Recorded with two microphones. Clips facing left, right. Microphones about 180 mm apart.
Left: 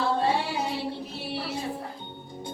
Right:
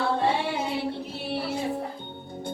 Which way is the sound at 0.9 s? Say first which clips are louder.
Right 2 dB; 55° right (ahead or behind).